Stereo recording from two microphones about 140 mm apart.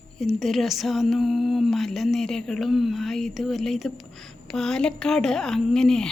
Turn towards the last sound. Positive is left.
turn(degrees=5)  # may be behind; listen again after turning